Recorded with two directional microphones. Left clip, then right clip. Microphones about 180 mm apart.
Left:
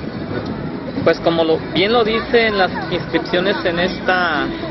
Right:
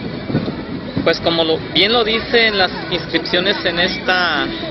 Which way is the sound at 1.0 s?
Centre (ahead or behind).